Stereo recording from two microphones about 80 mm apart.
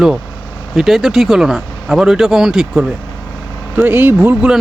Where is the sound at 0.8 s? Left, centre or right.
Centre.